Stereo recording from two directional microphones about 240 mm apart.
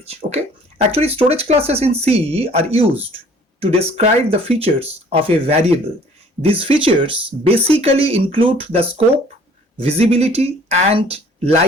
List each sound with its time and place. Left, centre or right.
0.8 s speech: right